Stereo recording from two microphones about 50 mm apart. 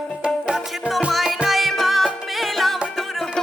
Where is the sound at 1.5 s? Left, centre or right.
Centre.